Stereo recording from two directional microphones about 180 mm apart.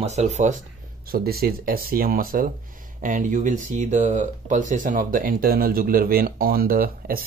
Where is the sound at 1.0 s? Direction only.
55° right (ahead or behind).